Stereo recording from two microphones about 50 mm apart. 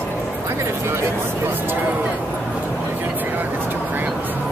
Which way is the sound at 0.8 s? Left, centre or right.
Right.